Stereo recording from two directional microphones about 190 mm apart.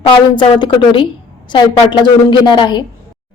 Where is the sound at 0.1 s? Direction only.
25° left (ahead or behind).